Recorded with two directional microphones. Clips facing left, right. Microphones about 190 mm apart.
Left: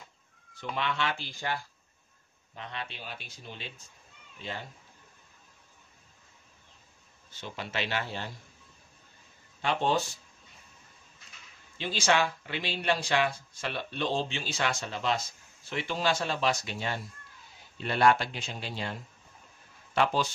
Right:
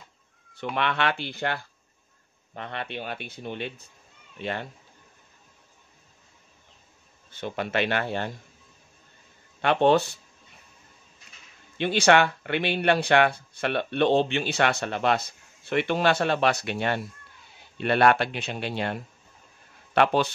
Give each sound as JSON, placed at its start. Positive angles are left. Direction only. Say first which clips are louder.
{"t": 0.6, "sound": "speech", "louder": "right 5 dB", "side_deg": -65}
{"t": 7.2, "sound": "speech", "louder": "right 9 dB", "side_deg": -55}
{"t": 9.6, "sound": "speech", "louder": "right 8 dB", "side_deg": -65}
{"t": 11.8, "sound": "speech", "louder": "right 7 dB", "side_deg": -65}